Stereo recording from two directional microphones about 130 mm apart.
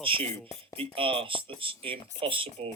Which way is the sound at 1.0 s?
45° right (ahead or behind).